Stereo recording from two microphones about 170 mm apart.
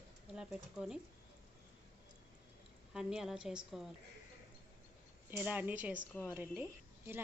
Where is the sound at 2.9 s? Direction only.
5° right (ahead or behind).